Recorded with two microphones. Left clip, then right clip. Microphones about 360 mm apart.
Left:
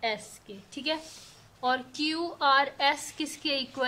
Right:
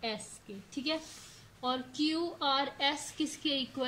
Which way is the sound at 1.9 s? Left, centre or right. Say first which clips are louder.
Left 2 dB; left.